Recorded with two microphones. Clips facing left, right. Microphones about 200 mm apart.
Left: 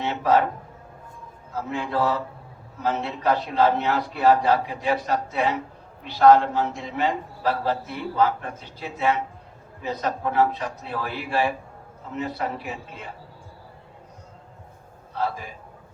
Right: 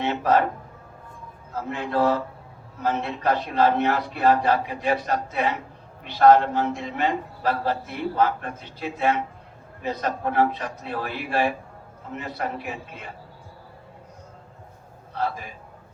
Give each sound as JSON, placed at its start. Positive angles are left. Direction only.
{"t": 0.0, "sound": "a man's voice", "side_deg": -55}
{"t": 1.7, "sound": "a man's voice", "side_deg": -50}
{"t": 15.1, "sound": "a man's voice", "side_deg": -55}